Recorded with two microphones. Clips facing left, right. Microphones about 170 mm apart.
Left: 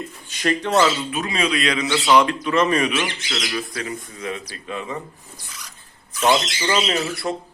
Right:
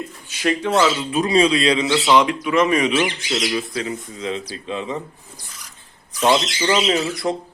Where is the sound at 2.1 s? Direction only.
10° right (ahead or behind).